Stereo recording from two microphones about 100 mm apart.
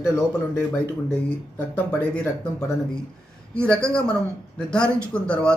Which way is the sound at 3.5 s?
10° left (ahead or behind).